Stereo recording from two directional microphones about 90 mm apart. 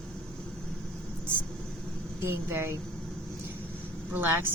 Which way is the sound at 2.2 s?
30° right (ahead or behind).